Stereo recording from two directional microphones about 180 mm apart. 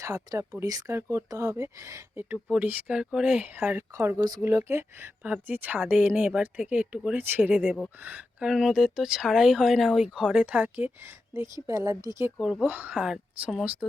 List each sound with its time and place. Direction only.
0.0 s speech: 20° right (ahead or behind)
12.4 s speech: 5° right (ahead or behind)